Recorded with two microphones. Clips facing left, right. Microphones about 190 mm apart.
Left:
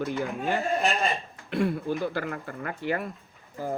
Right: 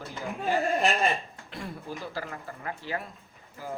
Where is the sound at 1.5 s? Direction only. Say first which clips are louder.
Left 11 dB; 60° left (ahead or behind).